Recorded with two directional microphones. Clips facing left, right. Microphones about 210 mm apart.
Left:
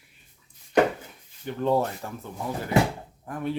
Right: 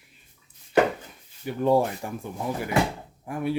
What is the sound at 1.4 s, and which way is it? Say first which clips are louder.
Speech: right 3 dB; 10° right (ahead or behind).